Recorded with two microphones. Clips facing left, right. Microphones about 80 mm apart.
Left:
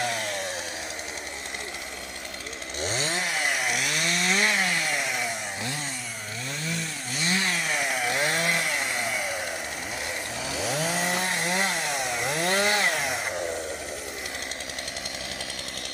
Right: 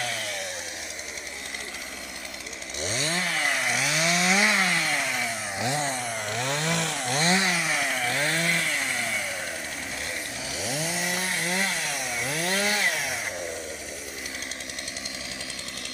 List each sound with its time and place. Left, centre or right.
0.0 s chainsaw: left
2.8 s chainsaw: left
3.1 s chainsaw: centre
6.3 s chainsaw: right
7.4 s chainsaw: centre
7.9 s chainsaw: centre
10.6 s chainsaw: left
12.4 s chainsaw: left